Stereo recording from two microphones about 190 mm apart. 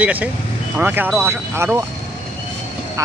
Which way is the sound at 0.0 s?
5° right (ahead or behind).